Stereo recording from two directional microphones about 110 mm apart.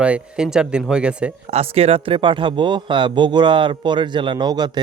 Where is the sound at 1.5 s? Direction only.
65° right (ahead or behind).